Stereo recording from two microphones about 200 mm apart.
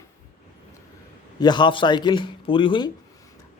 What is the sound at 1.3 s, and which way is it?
A man's voice, 20° left (ahead or behind).